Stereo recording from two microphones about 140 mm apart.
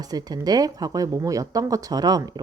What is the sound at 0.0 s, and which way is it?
Speech, 30° right (ahead or behind).